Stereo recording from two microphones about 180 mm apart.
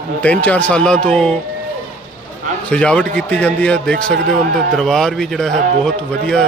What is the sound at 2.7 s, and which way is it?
A man's voice, 5° left (ahead or behind).